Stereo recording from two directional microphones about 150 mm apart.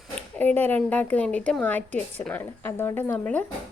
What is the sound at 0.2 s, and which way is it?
A woman's voice, 10° left (ahead or behind).